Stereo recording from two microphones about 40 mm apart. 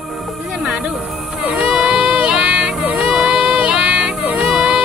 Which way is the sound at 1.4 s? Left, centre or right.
Right.